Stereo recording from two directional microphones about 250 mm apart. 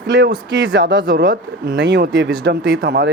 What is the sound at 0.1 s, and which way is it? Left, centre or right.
Speech, right.